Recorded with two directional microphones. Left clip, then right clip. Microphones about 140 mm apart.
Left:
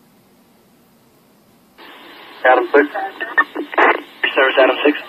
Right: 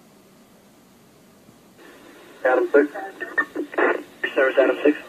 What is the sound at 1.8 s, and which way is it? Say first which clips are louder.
Radio: left 8 dB; 30° left (ahead or behind).